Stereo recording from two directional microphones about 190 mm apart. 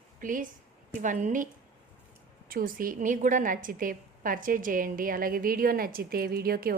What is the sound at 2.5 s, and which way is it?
A woman's voice, 45° right (ahead or behind).